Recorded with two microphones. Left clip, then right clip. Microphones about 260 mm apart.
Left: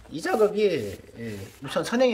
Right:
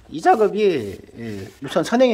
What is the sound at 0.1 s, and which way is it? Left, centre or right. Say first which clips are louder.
Speech: right 7 dB; centre.